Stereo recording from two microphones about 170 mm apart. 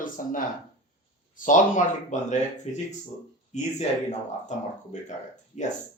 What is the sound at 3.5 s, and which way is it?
Speech, 45° left (ahead or behind).